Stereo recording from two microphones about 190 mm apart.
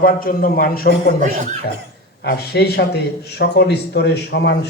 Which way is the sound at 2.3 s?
60° left (ahead or behind).